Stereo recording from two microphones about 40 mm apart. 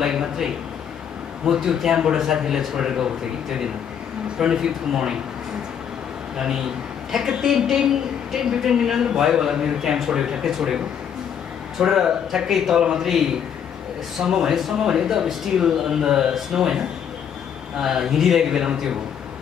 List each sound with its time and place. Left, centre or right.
0.0 s a woman's voice: centre
4.4 s a woman's voice: centre
6.3 s a man's voice: centre
11.8 s a woman's voice: centre